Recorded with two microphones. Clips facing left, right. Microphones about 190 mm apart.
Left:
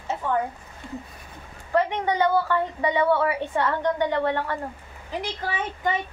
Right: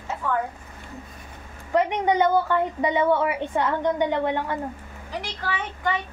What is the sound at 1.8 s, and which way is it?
A woman's voice, 20° right (ahead or behind).